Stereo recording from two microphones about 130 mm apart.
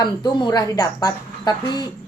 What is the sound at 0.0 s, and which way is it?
Speech, 30° left (ahead or behind).